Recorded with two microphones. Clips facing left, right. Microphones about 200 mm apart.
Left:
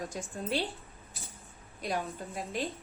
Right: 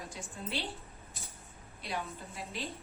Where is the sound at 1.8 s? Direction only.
45° left (ahead or behind).